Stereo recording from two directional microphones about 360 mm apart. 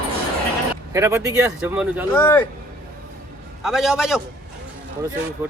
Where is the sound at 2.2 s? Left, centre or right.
Centre.